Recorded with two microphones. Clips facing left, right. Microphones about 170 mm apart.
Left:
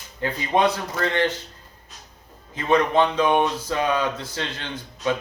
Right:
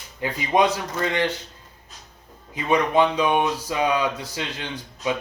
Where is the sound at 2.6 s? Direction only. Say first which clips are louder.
Even; 10° right (ahead or behind).